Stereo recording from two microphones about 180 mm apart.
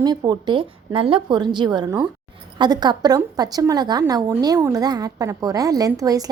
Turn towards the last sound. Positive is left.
turn(degrees=-20)  # may be behind; listen again after turning